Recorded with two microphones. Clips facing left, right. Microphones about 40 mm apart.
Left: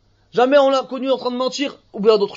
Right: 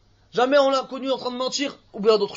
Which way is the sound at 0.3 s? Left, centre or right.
Left.